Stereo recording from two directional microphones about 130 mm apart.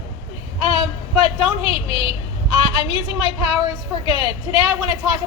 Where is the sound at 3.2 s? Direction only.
45° left (ahead or behind).